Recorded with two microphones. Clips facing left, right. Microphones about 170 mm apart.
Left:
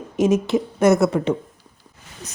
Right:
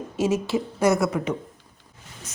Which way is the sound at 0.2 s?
20° left (ahead or behind).